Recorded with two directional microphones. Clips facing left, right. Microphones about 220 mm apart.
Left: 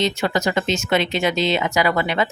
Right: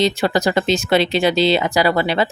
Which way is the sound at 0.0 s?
35° right (ahead or behind).